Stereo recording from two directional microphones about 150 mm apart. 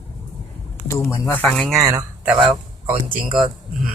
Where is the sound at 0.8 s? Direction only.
20° left (ahead or behind).